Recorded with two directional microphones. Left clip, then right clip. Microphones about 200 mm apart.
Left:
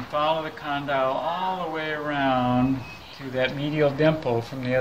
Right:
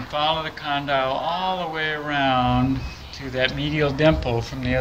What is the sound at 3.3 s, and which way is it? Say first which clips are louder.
Speech: right 2 dB; 20° left (ahead or behind).